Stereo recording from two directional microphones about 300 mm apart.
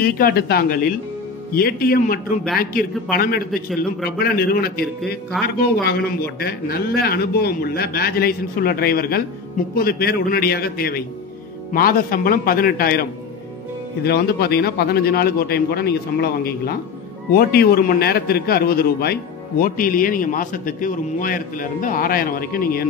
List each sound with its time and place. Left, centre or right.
0.0 s a man's voice: left
14.0 s a man's voice: left